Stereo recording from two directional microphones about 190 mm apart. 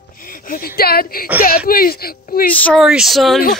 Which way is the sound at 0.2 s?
50° left (ahead or behind).